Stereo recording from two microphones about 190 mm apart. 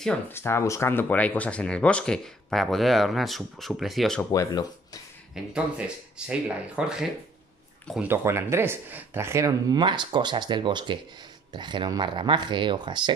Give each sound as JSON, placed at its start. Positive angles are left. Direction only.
{"t": 0.0, "sound": "speech", "side_deg": 10}
{"t": 4.3, "sound": "speech", "side_deg": 20}
{"t": 5.3, "sound": "speech", "side_deg": -5}